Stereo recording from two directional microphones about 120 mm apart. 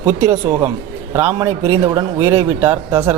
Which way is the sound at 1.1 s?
20° right (ahead or behind).